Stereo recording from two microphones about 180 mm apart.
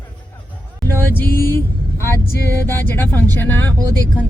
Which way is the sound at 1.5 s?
15° left (ahead or behind).